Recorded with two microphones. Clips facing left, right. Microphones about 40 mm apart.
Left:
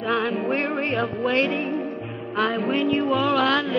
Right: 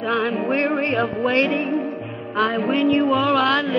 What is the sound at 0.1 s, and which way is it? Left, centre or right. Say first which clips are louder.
Music: right 2 dB; centre.